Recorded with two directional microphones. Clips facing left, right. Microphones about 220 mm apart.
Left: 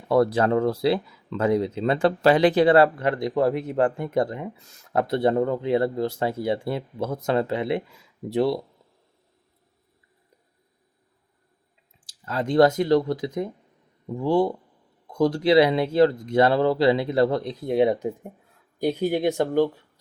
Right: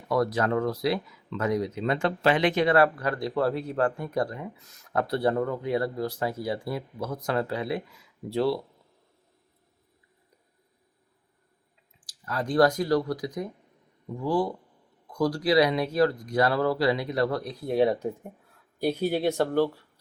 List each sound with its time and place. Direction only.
0.1 s speech: 30° left (ahead or behind)
12.0 s speech: 25° left (ahead or behind)